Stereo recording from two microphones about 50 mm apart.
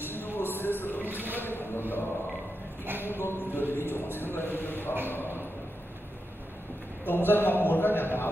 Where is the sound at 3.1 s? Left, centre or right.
Left.